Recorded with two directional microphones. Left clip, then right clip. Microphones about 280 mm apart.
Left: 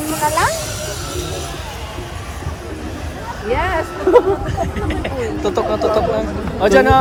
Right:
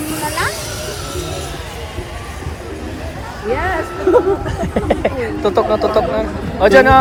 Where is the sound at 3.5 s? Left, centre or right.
Centre.